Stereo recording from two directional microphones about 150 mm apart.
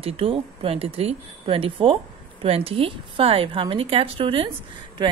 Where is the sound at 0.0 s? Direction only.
35° right (ahead or behind).